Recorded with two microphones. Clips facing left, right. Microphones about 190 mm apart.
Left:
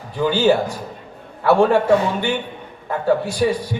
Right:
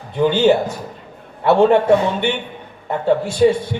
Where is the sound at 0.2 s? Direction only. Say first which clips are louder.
Right 2 dB; 20° right (ahead or behind).